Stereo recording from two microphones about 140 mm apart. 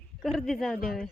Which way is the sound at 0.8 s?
90° left.